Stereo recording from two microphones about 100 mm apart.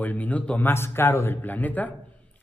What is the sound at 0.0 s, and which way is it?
Speech, 15° left (ahead or behind).